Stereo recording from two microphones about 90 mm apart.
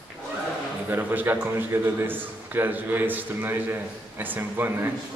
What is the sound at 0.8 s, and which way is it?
A man's voice, 25° right (ahead or behind).